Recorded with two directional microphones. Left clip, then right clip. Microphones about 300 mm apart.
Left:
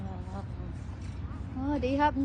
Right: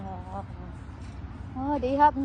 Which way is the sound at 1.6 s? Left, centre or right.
Centre.